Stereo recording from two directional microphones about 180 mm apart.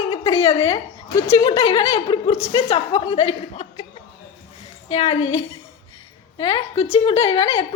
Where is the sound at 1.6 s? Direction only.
30° left (ahead or behind).